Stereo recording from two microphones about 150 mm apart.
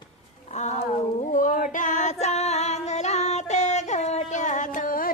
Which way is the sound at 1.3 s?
60° left (ahead or behind).